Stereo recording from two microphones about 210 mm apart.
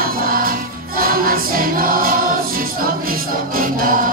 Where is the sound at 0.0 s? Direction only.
45° right (ahead or behind).